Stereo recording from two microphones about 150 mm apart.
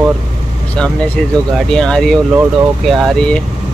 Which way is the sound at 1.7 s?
5° left (ahead or behind).